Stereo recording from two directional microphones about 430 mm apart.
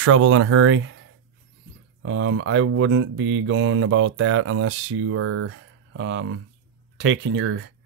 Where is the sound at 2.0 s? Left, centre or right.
Right.